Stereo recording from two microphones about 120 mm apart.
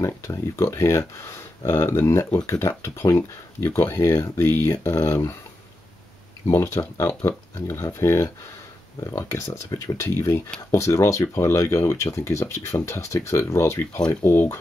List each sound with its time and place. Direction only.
0.0 s speech: 25° left (ahead or behind)
6.5 s speech: 25° left (ahead or behind)